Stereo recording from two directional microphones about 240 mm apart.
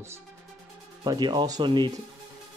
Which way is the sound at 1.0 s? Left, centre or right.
Centre.